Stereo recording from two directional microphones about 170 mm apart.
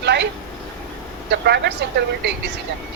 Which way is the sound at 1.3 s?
75° right (ahead or behind).